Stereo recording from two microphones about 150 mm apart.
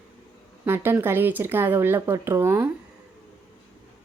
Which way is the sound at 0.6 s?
15° right (ahead or behind).